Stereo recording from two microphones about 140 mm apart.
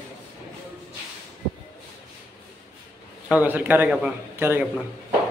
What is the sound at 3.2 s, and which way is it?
A man's voice, 10° right (ahead or behind).